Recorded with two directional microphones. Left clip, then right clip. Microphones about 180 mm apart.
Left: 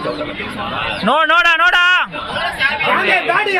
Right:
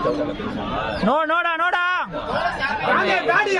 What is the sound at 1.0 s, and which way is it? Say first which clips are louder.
A man's voice: left 8 dB; 10° right (ahead or behind).